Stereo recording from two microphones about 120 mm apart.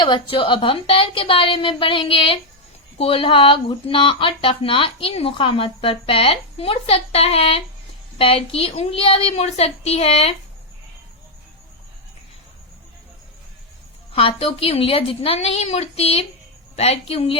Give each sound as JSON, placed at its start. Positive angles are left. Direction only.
{"t": 0.0, "sound": "a woman's voice", "side_deg": 45}
{"t": 14.1, "sound": "a woman's voice", "side_deg": 50}